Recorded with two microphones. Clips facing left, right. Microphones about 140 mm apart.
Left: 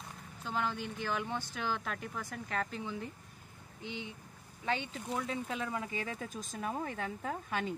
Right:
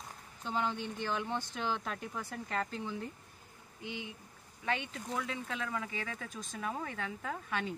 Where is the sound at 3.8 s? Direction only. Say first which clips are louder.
Even; 10° right (ahead or behind).